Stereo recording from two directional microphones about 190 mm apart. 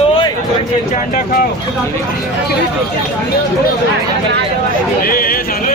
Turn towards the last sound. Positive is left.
turn(degrees=50)  # may be behind; listen again after turning